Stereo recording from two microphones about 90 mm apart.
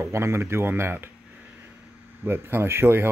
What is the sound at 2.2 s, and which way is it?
Speech, 25° right (ahead or behind).